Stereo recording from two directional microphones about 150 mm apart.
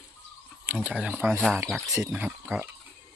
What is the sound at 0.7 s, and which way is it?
Speech, 10° right (ahead or behind).